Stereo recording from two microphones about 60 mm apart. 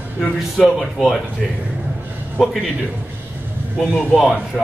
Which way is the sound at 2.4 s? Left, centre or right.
Centre.